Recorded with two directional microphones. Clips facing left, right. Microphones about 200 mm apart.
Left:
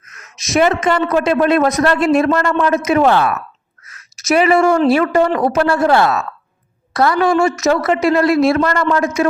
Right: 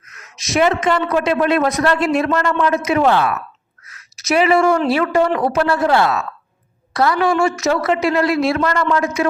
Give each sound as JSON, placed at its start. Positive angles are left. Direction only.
{"t": 0.0, "sound": "a woman's voice", "side_deg": 45}